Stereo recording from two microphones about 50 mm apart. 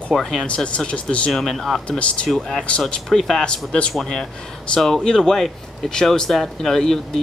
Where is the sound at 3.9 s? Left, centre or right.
Centre.